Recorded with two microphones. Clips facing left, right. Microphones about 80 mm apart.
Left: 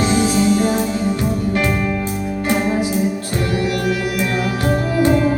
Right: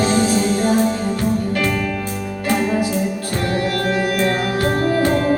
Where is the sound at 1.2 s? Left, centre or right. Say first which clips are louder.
Even; left.